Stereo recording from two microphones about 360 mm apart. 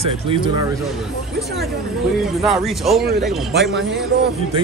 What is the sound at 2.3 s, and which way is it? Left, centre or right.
Speech, centre.